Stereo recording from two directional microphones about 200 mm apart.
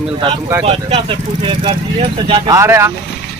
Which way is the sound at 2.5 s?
15° right (ahead or behind).